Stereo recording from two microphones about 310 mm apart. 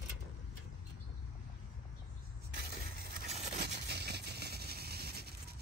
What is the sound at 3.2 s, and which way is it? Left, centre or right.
Vehicle, right.